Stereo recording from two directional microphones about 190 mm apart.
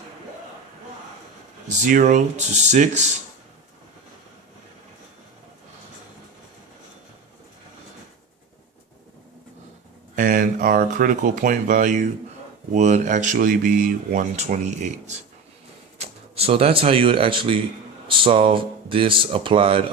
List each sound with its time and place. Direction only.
1.8 s speech: 40° right (ahead or behind)
10.2 s speech: 45° right (ahead or behind); by 19.8 s 30° right (ahead or behind)